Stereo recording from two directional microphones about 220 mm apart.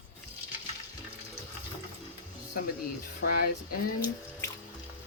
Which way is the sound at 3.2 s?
45° left (ahead or behind).